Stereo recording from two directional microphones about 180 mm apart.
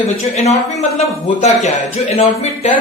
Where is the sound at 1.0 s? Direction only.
35° left (ahead or behind).